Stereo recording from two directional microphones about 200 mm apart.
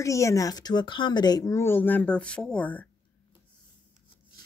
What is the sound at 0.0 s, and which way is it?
Speech, 15° left (ahead or behind).